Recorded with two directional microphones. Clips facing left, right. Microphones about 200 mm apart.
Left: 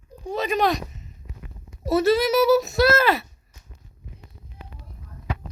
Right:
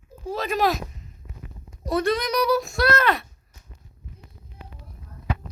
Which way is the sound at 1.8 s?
5° left (ahead or behind).